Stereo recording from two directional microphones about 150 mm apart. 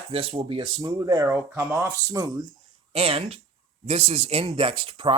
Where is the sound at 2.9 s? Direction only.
40° right (ahead or behind).